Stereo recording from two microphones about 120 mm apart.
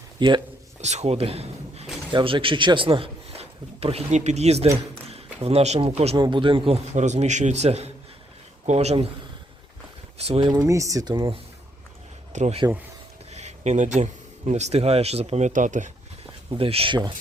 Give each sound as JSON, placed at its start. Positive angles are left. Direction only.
{"t": 0.2, "sound": "speech", "side_deg": -40}
{"t": 0.8, "sound": "a man's voice", "side_deg": -70}
{"t": 2.1, "sound": "speech", "side_deg": -45}
{"t": 6.1, "sound": "speech", "side_deg": -40}
{"t": 6.9, "sound": "a man's voice", "side_deg": -75}
{"t": 10.2, "sound": "speech", "side_deg": -60}
{"t": 10.5, "sound": "speech", "side_deg": -25}
{"t": 12.3, "sound": "speech", "side_deg": -80}
{"t": 16.5, "sound": "speech", "side_deg": -50}